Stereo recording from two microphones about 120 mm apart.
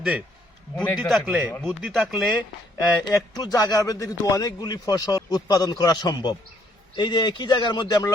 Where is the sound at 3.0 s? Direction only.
30° left (ahead or behind).